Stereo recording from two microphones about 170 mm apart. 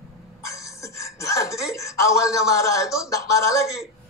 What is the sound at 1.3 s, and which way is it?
Speech, 20° left (ahead or behind).